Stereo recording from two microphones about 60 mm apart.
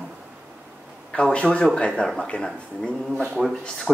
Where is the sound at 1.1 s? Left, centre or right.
Centre.